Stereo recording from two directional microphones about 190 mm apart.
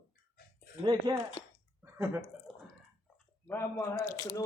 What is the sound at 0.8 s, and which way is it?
Speech, 25° right (ahead or behind).